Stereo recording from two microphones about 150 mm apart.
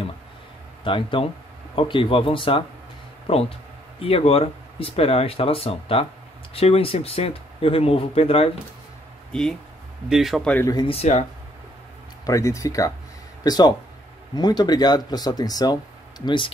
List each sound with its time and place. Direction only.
0.8 s speech: 35° left (ahead or behind)
9.3 s speech: 5° left (ahead or behind)
10.9 s speech: 45° left (ahead or behind)
12.3 s speech: 20° left (ahead or behind)